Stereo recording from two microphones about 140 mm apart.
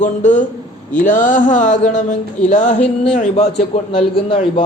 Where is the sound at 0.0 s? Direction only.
60° left (ahead or behind).